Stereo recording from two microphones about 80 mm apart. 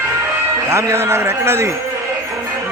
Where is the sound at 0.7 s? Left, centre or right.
Right.